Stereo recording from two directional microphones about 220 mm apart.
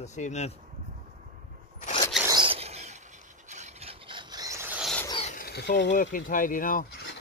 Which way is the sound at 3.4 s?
30° right (ahead or behind).